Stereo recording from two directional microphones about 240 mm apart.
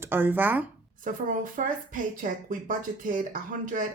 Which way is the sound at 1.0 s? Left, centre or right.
Right.